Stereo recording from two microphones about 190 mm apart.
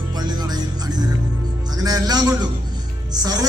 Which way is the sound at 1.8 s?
20° right (ahead or behind).